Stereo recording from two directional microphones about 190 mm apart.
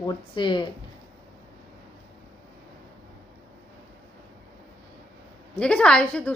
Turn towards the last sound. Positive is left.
turn(degrees=5)  # may be behind; listen again after turning